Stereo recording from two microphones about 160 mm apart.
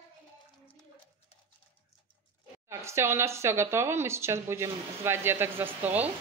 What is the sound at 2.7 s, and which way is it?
Speech, 15° right (ahead or behind).